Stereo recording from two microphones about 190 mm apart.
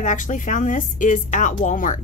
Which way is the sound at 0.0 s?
40° left (ahead or behind).